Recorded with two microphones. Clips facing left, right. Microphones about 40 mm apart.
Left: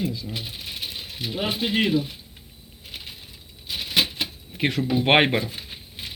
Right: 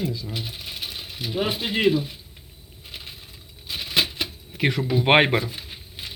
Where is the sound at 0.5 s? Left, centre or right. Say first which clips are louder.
Even; centre.